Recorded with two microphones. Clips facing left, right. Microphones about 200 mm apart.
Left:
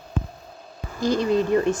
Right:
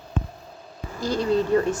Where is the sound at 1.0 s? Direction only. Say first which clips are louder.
Left 2 dB; 15° left (ahead or behind).